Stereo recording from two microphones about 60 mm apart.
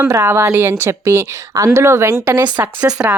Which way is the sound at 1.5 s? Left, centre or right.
Right.